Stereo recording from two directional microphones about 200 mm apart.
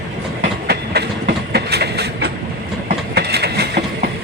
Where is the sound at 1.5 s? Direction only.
55° right (ahead or behind).